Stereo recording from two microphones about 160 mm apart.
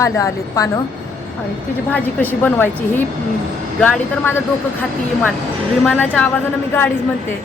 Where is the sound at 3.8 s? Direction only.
10° left (ahead or behind).